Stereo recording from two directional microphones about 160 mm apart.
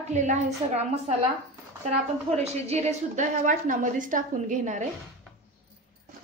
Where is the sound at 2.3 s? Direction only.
40° right (ahead or behind).